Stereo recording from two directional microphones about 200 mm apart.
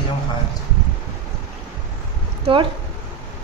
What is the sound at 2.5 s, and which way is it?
Speech, 25° right (ahead or behind).